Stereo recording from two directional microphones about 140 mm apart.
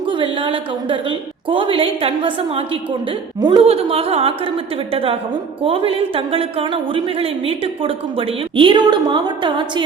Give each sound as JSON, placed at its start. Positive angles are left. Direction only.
{"t": 0.1, "sound": "speech", "side_deg": -35}